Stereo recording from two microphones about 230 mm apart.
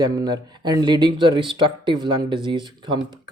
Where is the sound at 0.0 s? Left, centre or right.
Centre.